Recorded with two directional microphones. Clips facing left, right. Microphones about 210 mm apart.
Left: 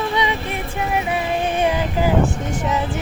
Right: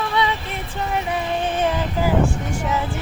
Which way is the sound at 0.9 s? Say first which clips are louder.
Left 2 dB; 10° left (ahead or behind).